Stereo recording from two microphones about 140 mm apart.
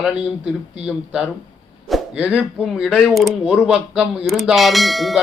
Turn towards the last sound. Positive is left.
turn(degrees=0)  # may be behind; listen again after turning